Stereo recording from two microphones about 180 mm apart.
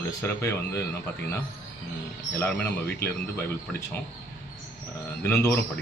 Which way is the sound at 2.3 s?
10° left (ahead or behind).